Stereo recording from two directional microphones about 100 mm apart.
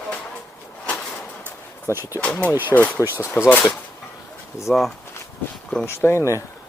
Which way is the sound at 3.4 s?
30° left (ahead or behind).